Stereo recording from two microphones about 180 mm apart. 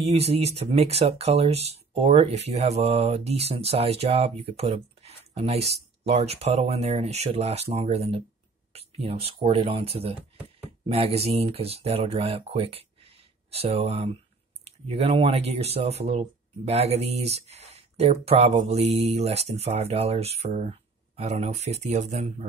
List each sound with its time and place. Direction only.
0.0 s speech: 35° right (ahead or behind)